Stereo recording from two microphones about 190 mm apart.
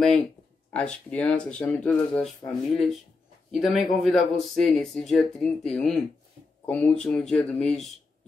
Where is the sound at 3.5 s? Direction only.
Centre (ahead or behind).